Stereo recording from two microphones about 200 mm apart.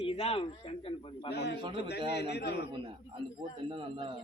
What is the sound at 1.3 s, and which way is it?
Speech, 55° left (ahead or behind).